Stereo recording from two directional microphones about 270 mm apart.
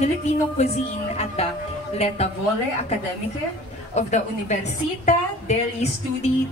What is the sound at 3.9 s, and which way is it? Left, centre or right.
A woman's voice, left.